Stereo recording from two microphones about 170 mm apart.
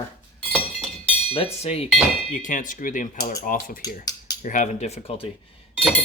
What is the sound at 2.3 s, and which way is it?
Speech, 50° left (ahead or behind).